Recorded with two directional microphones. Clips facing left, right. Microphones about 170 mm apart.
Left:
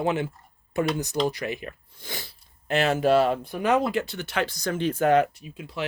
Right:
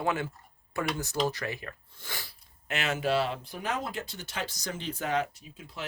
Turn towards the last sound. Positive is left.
turn(degrees=70)  # may be behind; listen again after turning